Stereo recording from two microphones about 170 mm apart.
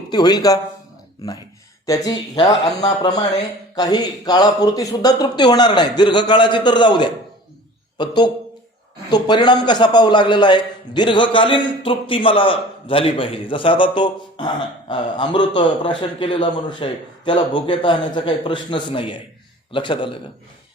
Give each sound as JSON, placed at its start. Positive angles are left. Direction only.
{"t": 0.1, "sound": "a man's voice", "side_deg": 25}
{"t": 1.9, "sound": "a man's voice", "side_deg": 25}